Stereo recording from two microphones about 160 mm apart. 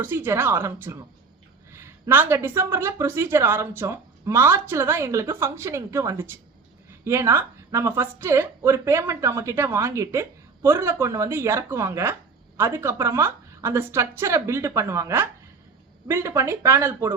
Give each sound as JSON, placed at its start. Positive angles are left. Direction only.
{"t": 0.0, "sound": "a woman's voice", "side_deg": -15}